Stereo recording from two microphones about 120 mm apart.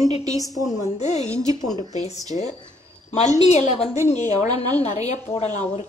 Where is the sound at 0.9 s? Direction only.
70° left (ahead or behind).